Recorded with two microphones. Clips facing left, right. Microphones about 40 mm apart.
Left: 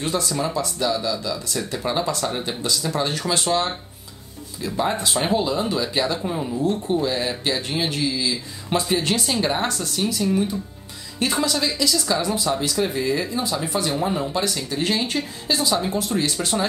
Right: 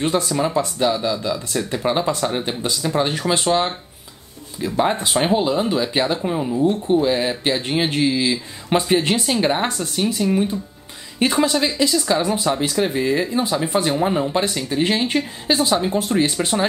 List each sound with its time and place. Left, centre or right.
0.0 s speech: right